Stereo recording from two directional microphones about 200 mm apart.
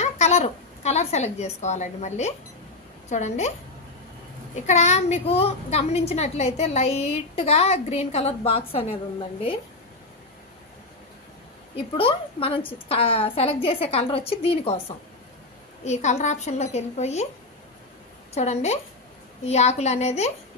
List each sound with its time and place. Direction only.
0.0 s a woman's voice: 35° left (ahead or behind)
4.6 s a child's voice: 35° left (ahead or behind)
11.7 s a woman's voice: 25° left (ahead or behind)
15.8 s a child's voice: 35° left (ahead or behind)
18.3 s a child's voice: 35° left (ahead or behind)